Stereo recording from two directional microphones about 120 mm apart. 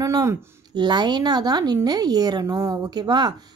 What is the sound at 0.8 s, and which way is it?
A woman's voice, 35° right (ahead or behind).